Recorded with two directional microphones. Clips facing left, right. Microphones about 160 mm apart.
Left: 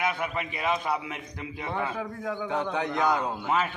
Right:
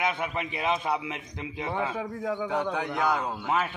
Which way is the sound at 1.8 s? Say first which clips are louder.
Even; 10° right (ahead or behind).